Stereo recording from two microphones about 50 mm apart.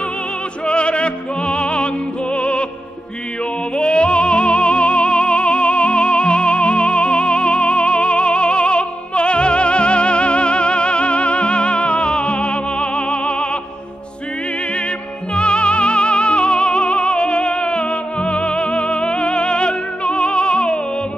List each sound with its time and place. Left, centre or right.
0.7 s music: left
2.3 s opera: left
3.7 s music: left
15.3 s music: left